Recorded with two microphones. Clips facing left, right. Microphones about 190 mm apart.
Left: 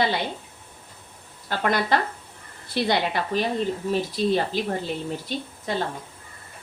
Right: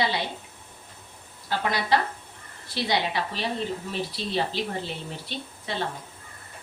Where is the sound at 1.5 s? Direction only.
55° left (ahead or behind).